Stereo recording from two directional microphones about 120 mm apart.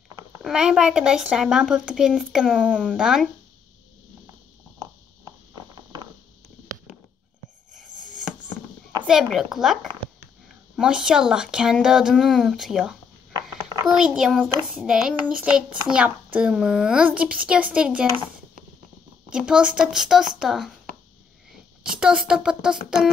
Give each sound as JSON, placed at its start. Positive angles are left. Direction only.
{"t": 0.4, "sound": "a woman's voice", "side_deg": -5}
{"t": 8.0, "sound": "a sound", "side_deg": -90}
{"t": 9.0, "sound": "a woman's voice", "side_deg": 0}
{"t": 19.3, "sound": "a woman's voice", "side_deg": -10}
{"t": 21.9, "sound": "a child's voice", "side_deg": -5}